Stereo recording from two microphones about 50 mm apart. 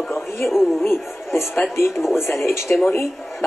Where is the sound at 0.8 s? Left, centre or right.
Left.